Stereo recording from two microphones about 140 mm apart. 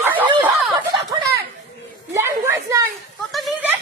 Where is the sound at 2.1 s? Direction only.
20° right (ahead or behind).